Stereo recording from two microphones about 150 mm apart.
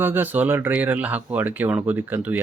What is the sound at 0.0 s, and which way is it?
Speech, 15° right (ahead or behind).